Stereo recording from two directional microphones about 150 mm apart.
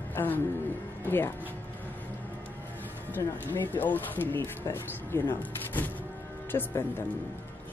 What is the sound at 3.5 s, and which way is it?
Speech, 15° left (ahead or behind).